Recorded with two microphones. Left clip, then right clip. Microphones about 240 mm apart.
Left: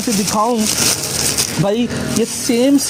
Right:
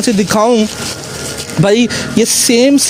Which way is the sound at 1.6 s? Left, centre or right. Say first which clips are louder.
Right 8 dB; right.